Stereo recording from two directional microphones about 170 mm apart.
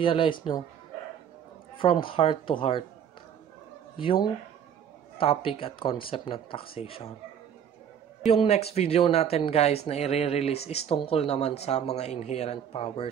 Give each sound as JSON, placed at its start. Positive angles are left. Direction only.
{"t": 0.0, "sound": "speech", "side_deg": 30}
{"t": 1.8, "sound": "speech", "side_deg": 30}
{"t": 4.0, "sound": "speech", "side_deg": 30}
{"t": 8.2, "sound": "speech", "side_deg": 35}